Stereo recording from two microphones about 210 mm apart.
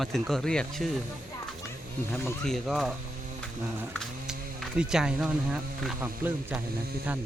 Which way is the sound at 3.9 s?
Centre (ahead or behind).